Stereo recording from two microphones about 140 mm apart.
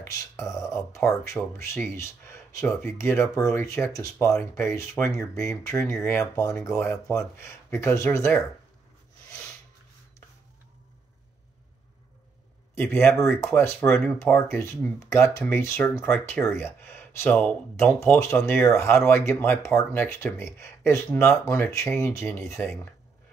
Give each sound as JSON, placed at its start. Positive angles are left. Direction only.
{"t": 0.0, "sound": "speech", "side_deg": 20}
{"t": 12.7, "sound": "speech", "side_deg": 15}